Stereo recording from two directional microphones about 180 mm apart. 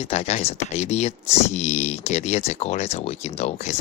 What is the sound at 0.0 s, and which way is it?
Speech, 35° left (ahead or behind).